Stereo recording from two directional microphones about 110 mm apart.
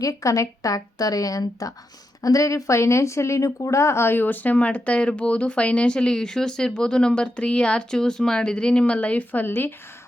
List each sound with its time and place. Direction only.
0.0 s a woman's voice: 30° left (ahead or behind)